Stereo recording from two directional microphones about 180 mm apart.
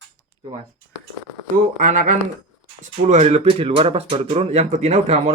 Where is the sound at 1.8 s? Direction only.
45° right (ahead or behind).